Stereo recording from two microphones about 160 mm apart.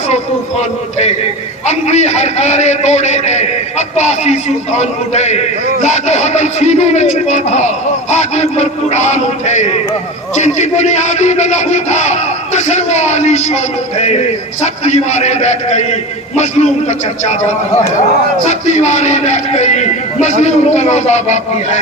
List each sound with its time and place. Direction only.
1.6 s a man's voice: 45° left (ahead or behind)
14.6 s a man's voice: 45° left (ahead or behind)
18.6 s a man's voice: 45° left (ahead or behind)